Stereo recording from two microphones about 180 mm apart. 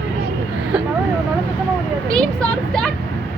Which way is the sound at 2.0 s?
5° left (ahead or behind).